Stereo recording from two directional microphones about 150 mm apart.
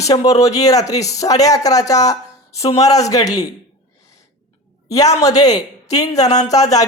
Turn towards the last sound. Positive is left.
turn(degrees=25)  # may be behind; listen again after turning